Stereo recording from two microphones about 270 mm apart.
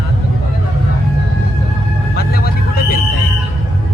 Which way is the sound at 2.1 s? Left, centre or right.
Left.